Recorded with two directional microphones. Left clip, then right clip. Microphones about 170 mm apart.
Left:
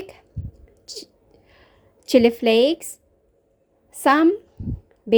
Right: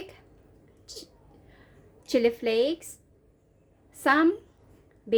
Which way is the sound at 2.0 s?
45° left (ahead or behind).